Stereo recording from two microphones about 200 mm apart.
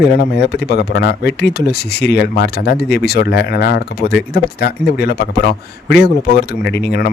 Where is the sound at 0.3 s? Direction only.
55° left (ahead or behind).